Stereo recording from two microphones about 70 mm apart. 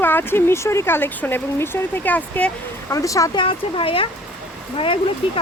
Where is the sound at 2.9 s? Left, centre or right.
Left.